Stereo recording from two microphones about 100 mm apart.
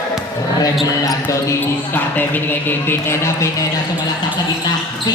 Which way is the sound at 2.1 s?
20° left (ahead or behind).